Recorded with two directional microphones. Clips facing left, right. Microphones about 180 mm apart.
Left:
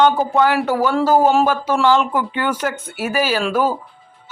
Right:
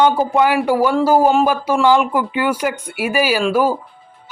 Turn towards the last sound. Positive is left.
turn(degrees=-10)  # may be behind; listen again after turning